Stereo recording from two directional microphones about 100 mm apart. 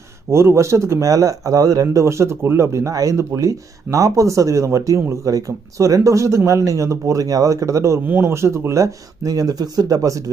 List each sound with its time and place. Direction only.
0.3 s speech: 25° right (ahead or behind)